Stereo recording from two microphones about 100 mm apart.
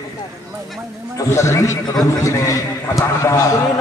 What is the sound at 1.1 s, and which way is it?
Speech, 30° left (ahead or behind).